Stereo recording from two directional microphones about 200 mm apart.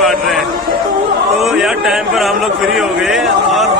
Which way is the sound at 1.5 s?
Centre (ahead or behind).